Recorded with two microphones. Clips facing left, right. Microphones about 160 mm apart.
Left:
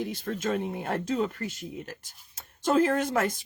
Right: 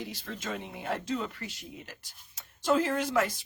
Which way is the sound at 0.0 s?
50° left (ahead or behind).